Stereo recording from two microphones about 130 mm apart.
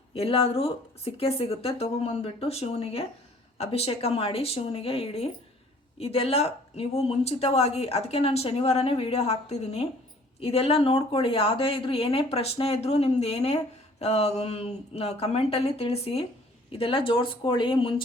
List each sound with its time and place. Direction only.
0.1 s speech: 45° left (ahead or behind)